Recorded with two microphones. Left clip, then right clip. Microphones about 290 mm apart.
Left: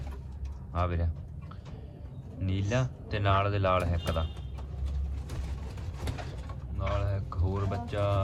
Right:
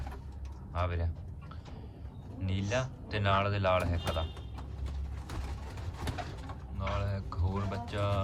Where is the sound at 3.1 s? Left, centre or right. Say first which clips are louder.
Left 2 dB; centre.